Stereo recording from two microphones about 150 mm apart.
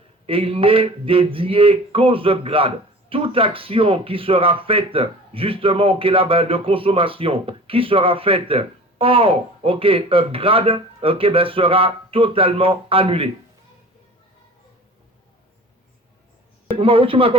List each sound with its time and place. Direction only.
0.3 s speech: 35° right (ahead or behind)
16.6 s speech: 35° right (ahead or behind)